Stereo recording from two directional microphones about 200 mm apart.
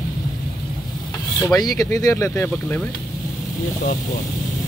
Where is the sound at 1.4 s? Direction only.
15° left (ahead or behind).